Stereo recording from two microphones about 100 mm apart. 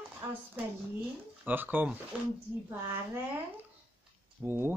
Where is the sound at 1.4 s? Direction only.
20° right (ahead or behind).